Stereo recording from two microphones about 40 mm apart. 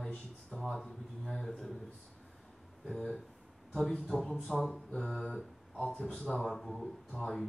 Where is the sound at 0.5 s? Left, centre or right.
Left.